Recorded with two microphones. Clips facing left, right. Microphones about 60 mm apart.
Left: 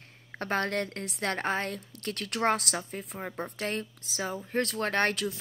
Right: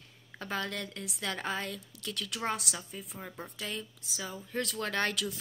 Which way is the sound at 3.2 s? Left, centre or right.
Left.